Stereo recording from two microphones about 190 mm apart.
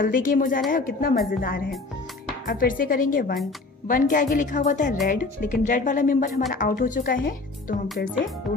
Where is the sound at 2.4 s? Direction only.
50° left (ahead or behind).